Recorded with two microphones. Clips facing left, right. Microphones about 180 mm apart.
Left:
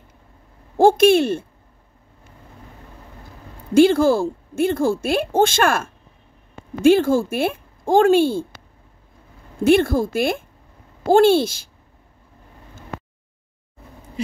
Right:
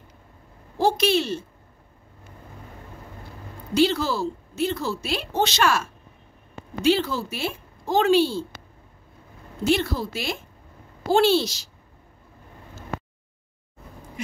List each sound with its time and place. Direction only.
0.7 s a woman's voice: 50° left (ahead or behind)
3.7 s a woman's voice: 50° left (ahead or behind)
9.7 s a woman's voice: 50° left (ahead or behind)